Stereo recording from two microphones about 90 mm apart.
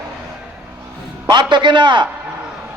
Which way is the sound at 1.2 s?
55° right (ahead or behind).